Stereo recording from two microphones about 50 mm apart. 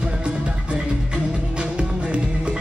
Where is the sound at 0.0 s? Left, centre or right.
Right.